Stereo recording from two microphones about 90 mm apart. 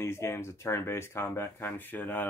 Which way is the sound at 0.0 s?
30° left (ahead or behind).